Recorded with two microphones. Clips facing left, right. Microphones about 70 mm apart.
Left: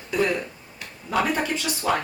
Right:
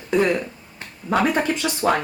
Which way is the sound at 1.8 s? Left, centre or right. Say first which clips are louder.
Right 4 dB; right.